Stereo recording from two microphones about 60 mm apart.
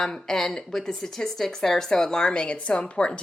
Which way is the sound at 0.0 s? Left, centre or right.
Centre.